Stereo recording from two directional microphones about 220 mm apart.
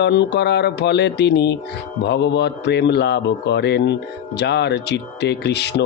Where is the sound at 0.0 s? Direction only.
50° left (ahead or behind).